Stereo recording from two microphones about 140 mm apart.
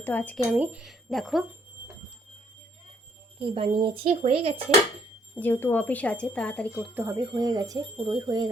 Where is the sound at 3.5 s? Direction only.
40° right (ahead or behind).